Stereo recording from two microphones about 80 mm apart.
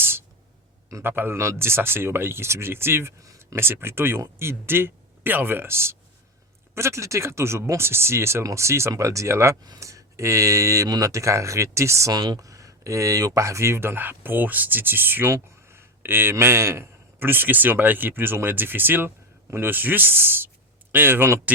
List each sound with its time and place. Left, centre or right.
0.0 s a sound: right
1.0 s speech: right
9.6 s speech: right